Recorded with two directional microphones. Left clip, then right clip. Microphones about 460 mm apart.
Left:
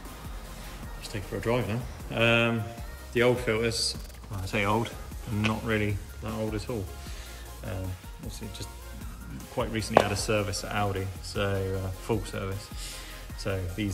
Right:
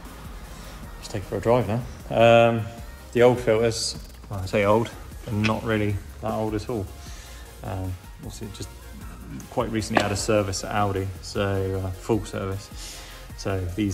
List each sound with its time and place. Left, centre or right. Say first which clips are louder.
1.0 s speech: right 7 dB; centre
9.6 s speech: right 1 dB; centre